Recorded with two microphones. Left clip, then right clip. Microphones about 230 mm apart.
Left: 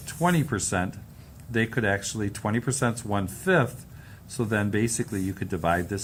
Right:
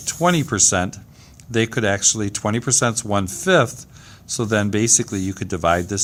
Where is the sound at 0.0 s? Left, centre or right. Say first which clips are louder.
Right 7 dB; right.